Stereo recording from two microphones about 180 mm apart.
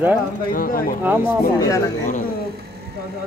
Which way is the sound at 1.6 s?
15° left (ahead or behind).